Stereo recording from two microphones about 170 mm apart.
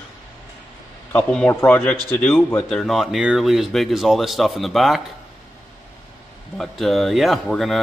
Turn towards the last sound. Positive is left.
turn(degrees=0)  # may be behind; listen again after turning